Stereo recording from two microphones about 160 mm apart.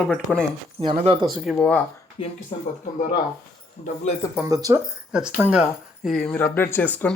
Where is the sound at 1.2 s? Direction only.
5° left (ahead or behind).